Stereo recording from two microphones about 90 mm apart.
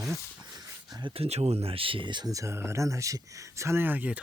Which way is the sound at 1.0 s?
90° right.